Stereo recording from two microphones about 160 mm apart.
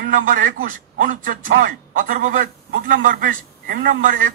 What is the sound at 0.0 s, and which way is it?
A man's voice, 60° right (ahead or behind).